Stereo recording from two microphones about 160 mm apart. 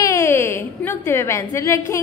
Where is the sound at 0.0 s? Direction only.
15° left (ahead or behind).